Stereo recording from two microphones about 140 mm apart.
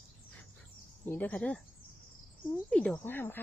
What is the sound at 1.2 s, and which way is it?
Speech, 10° left (ahead or behind).